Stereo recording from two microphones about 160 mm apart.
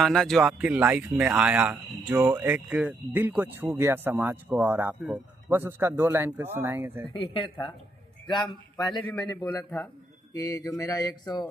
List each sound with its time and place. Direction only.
0.0 s speech: centre (ahead or behind); by 7.0 s 15° right (ahead or behind)
7.1 s speech: 35° left (ahead or behind)
9.0 s speech: 20° left (ahead or behind)
9.6 s speech: 5° left (ahead or behind)
10.3 s speech: 20° left (ahead or behind)